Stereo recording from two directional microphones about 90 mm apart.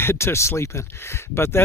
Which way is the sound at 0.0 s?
30° left (ahead or behind).